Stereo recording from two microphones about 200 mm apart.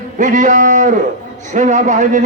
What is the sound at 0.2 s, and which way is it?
A man's voice, 40° right (ahead or behind).